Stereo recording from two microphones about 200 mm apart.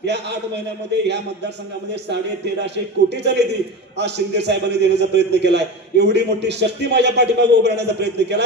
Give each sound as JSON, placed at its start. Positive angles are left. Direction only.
{"t": 0.0, "sound": "a man's voice", "side_deg": -60}
{"t": 4.0, "sound": "a man's voice", "side_deg": -60}